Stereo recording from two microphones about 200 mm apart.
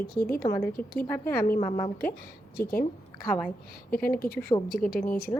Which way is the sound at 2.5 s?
50° left (ahead or behind).